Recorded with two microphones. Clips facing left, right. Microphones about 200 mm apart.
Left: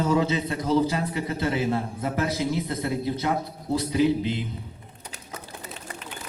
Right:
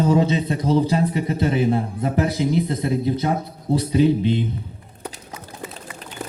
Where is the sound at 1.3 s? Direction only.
25° right (ahead or behind).